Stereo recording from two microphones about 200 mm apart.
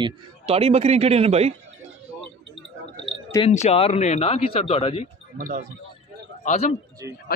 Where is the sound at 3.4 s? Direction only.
30° left (ahead or behind).